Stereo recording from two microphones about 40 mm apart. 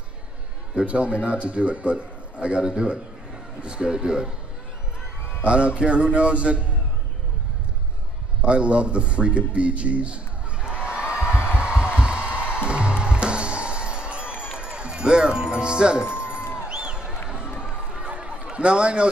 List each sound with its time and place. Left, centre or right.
0.8 s a man's voice: right
5.4 s a man's voice: right
8.4 s a man's voice: right
9.5 s a sound: right
11.5 s music: right
17.3 s a sound: right